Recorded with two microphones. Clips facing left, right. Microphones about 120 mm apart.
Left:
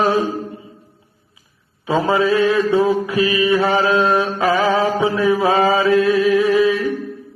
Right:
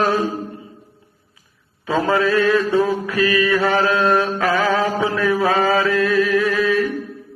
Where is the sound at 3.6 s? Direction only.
5° left (ahead or behind).